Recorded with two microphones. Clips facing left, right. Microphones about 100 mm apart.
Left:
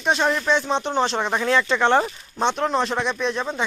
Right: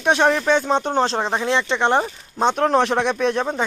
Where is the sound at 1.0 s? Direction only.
35° right (ahead or behind).